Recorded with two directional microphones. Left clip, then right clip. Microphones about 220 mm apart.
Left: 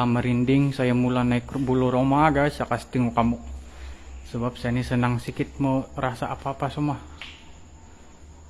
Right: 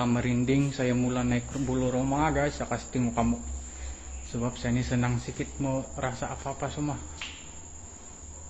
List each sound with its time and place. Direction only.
0.0 s speech: 20° left (ahead or behind)
4.3 s speech: 25° left (ahead or behind)